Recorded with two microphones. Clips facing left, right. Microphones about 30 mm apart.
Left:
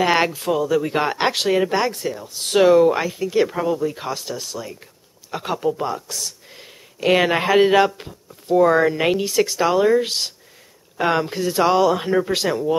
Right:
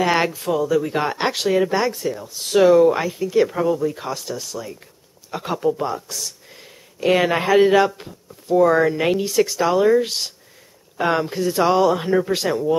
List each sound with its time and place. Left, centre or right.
0.4 s speech: centre
2.0 s speech: centre